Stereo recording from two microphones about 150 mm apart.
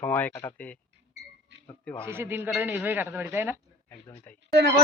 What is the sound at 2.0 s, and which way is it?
Speech, 15° right (ahead or behind).